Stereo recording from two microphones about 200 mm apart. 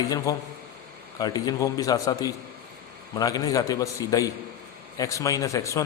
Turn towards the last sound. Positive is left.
turn(degrees=15)  # may be behind; listen again after turning